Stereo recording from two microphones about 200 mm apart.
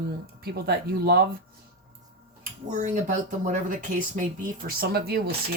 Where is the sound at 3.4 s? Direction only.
40° right (ahead or behind).